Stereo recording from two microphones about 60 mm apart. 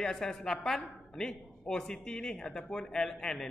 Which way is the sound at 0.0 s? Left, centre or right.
Centre.